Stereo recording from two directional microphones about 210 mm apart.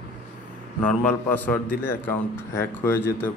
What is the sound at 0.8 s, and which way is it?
Speech, 10° left (ahead or behind).